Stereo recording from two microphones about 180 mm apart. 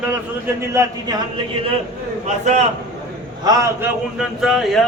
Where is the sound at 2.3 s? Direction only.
40° right (ahead or behind).